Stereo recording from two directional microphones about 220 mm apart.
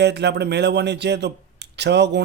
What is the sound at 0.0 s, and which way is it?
A man's voice, 50° right (ahead or behind).